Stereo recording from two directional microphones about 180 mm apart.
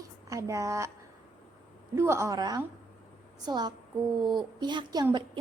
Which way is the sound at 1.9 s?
15° right (ahead or behind).